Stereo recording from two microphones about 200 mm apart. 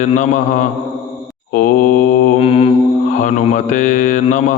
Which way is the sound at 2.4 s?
30° left (ahead or behind).